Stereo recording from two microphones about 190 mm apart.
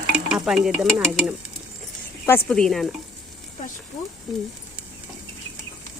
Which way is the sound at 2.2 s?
10° left (ahead or behind).